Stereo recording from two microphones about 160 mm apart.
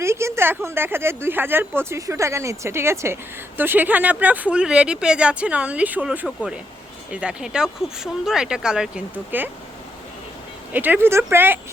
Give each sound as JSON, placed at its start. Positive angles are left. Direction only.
{"t": 0.0, "sound": "speech", "side_deg": -15}
{"t": 10.7, "sound": "speech", "side_deg": -10}